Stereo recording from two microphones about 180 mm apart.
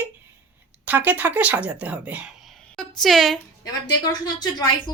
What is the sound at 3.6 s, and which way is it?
A woman's voice, 20° left (ahead or behind).